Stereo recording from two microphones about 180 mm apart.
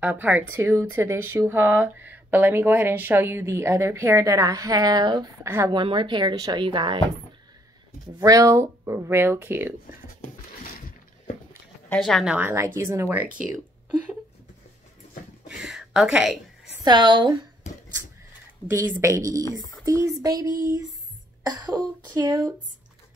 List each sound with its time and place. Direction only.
0.0 s speech: 10° right (ahead or behind); by 7.0 s 25° right (ahead or behind)
8.2 s speech: 20° right (ahead or behind)
10.6 s a sound: 50° left (ahead or behind)
11.9 s speech: centre (ahead or behind)
15.4 s speech: 5° right (ahead or behind)
16.8 s speech: 25° right (ahead or behind)
18.7 s speech: 15° right (ahead or behind)